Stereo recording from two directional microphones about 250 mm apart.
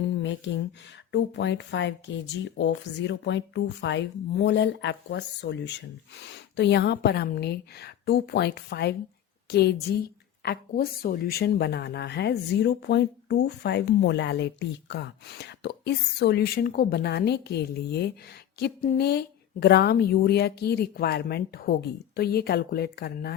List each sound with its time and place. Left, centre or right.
1.1 s a woman's voice: left